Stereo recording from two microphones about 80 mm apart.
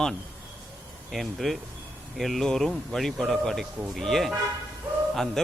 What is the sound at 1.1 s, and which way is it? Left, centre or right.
A man's voice, centre.